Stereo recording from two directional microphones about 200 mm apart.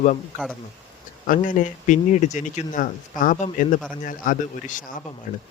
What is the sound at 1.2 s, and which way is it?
Speech, 40° left (ahead or behind).